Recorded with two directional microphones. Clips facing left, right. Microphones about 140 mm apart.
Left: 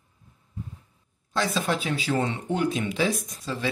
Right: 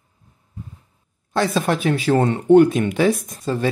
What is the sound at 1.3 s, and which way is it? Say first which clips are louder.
Speech: right 6 dB; 55° right (ahead or behind).